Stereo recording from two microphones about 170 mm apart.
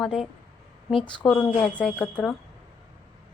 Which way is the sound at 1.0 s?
30° left (ahead or behind).